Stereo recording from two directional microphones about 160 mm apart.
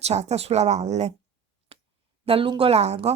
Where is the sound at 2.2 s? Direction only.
35° right (ahead or behind).